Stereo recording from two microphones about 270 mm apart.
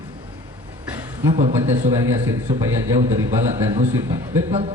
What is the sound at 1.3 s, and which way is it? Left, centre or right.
Speech, right.